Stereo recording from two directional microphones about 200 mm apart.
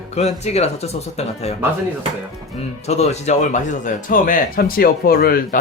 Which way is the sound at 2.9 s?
35° left (ahead or behind).